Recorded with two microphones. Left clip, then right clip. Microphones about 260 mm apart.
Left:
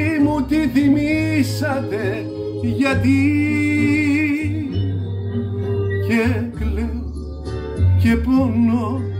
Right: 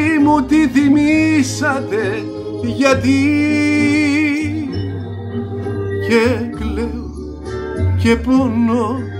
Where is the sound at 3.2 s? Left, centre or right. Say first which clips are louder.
Right 4 dB; right.